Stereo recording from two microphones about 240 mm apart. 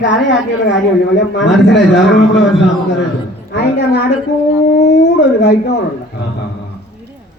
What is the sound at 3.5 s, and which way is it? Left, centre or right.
A man's voice, left.